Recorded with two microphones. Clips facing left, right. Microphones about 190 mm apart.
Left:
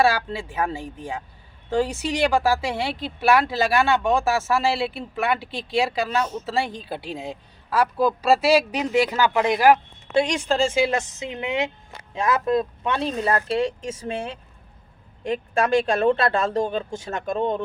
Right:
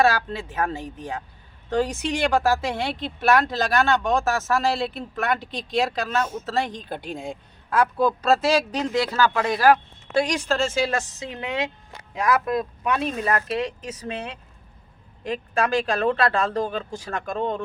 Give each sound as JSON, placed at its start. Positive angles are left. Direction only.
{"t": 0.0, "sound": "speech", "side_deg": 10}